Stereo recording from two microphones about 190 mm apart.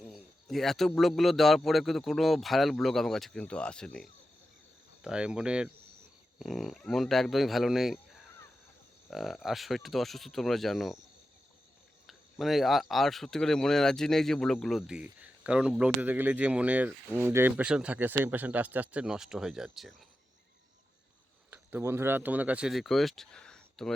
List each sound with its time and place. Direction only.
0.0 s speech: centre (ahead or behind)
12.0 s speech: centre (ahead or behind)
21.5 s speech: 10° right (ahead or behind)